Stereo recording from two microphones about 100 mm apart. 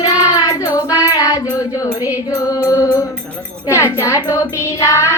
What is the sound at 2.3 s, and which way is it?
Child singing, 35° left (ahead or behind).